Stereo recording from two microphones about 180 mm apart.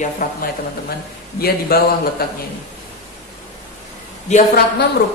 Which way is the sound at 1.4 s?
60° left (ahead or behind).